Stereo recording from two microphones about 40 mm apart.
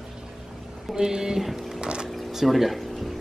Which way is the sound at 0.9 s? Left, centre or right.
Centre.